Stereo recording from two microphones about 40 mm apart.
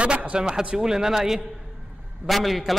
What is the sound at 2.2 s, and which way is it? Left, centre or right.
Speech, centre.